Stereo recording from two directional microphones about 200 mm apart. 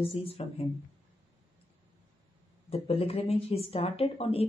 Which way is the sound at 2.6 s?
30° left (ahead or behind).